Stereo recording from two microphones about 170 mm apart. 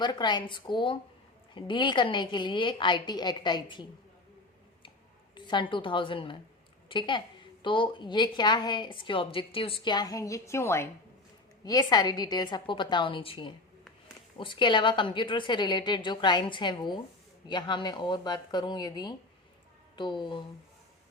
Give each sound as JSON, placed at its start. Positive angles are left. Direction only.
{"t": 0.0, "sound": "a woman's voice", "side_deg": 25}
{"t": 5.3, "sound": "a woman's voice", "side_deg": 25}